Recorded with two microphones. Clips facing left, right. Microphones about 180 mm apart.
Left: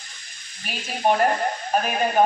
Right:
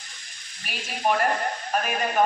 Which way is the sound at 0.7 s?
Centre (ahead or behind).